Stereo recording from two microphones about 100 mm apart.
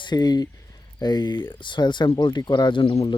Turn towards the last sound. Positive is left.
turn(degrees=80)